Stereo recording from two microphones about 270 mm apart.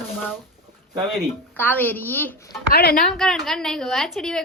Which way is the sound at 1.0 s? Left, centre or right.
Centre.